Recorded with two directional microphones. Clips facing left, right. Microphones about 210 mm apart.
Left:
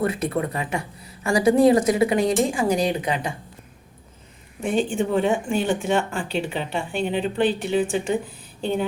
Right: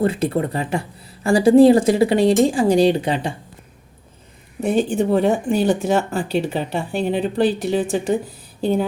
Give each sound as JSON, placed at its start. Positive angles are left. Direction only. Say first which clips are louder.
{"t": 0.0, "sound": "a woman's voice", "louder": "right 4 dB", "side_deg": -30}
{"t": 4.6, "sound": "speech", "louder": "right 4 dB", "side_deg": -40}